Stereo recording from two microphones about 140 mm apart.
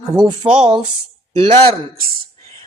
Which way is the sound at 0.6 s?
50° right (ahead or behind).